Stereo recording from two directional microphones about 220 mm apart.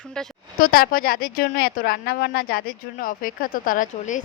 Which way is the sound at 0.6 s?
40° left (ahead or behind).